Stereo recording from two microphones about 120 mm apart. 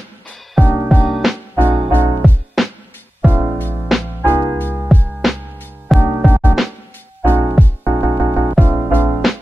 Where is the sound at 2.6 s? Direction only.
Centre (ahead or behind).